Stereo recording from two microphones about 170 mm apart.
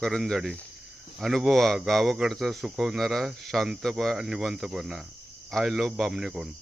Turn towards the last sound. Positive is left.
turn(degrees=0)  # may be behind; listen again after turning